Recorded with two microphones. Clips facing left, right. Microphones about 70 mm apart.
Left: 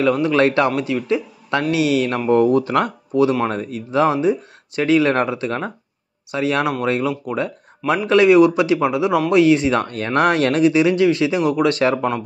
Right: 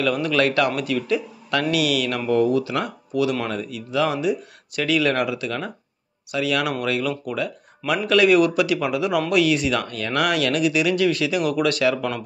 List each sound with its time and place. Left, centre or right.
0.0 s a man's voice: left
3.1 s a man's voice: left